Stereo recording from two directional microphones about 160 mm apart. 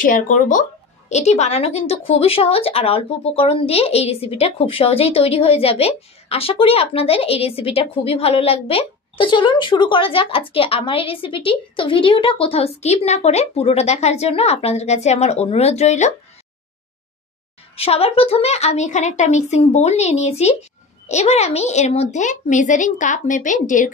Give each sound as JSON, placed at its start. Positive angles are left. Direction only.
{"t": 0.0, "sound": "speech", "side_deg": 55}
{"t": 17.7, "sound": "a woman's voice", "side_deg": 40}